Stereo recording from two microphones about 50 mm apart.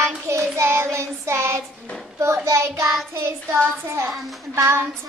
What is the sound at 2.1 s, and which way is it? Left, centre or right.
Speech, right.